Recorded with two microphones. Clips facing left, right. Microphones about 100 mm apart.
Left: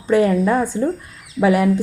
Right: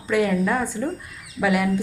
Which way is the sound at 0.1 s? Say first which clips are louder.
Left 5 dB; 35° left (ahead or behind).